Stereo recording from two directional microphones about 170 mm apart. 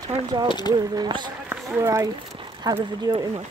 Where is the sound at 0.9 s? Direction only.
25° right (ahead or behind).